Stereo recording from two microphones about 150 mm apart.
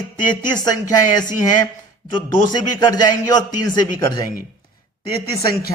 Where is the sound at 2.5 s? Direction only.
25° left (ahead or behind).